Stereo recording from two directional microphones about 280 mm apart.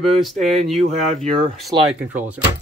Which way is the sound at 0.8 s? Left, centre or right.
Right.